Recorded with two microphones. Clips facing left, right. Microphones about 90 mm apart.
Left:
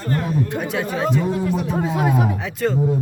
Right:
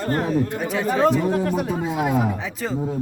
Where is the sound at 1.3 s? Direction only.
50° right (ahead or behind).